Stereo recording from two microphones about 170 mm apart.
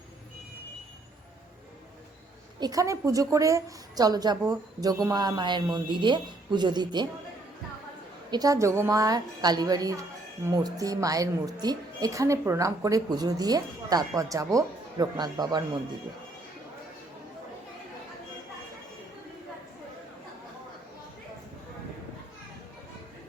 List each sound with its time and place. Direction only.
2.6 s a woman's voice: 20° right (ahead or behind)
8.3 s a woman's voice: 20° right (ahead or behind)